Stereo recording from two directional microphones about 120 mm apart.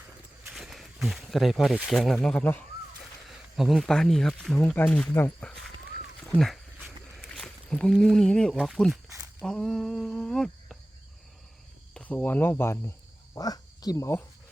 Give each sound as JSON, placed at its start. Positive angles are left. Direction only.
{"t": 0.5, "sound": "speech", "side_deg": 0}
{"t": 3.2, "sound": "speech", "side_deg": 0}
{"t": 9.5, "sound": "a sound", "side_deg": 5}
{"t": 11.9, "sound": "speech", "side_deg": 10}
{"t": 13.3, "sound": "speech", "side_deg": 30}